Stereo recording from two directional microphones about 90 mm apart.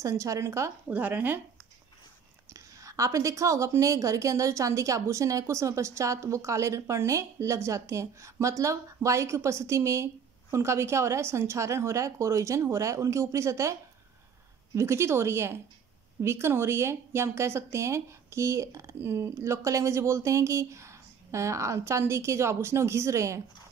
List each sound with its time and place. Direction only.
0.0 s a woman's voice: 35° right (ahead or behind)
0.8 s speech: 20° right (ahead or behind)
2.5 s a woman's voice: 35° right (ahead or behind)
14.8 s a woman's voice: 30° right (ahead or behind)